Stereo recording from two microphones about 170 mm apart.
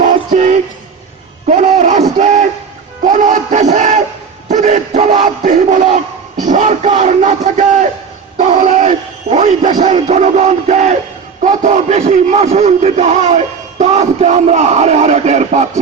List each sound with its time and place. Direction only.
0.0 s music: 40° right (ahead or behind)
1.5 s a sound: 45° right (ahead or behind)
3.0 s music: 50° right (ahead or behind)
4.4 s battle cry: 45° right (ahead or behind)
6.4 s a sound: 45° right (ahead or behind)
9.8 s music: 40° right (ahead or behind)
11.4 s a man's voice: 45° right (ahead or behind)